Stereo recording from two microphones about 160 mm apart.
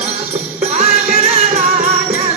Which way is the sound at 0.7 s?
40° right (ahead or behind).